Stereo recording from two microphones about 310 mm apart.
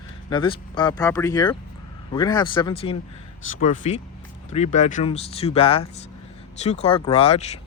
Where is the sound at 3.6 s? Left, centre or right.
Left.